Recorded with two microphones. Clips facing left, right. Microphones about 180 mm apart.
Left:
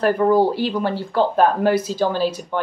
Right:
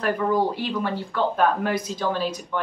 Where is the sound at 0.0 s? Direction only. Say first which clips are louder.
Left 6 dB; 30° left (ahead or behind).